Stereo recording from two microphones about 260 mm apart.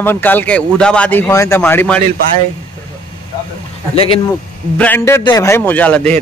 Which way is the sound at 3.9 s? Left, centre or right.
Left.